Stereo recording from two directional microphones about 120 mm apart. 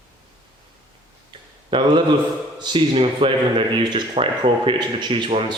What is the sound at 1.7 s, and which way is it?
A man's voice, 40° right (ahead or behind).